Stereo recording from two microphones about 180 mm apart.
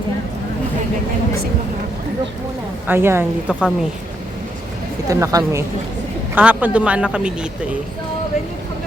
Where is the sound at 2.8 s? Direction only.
10° right (ahead or behind).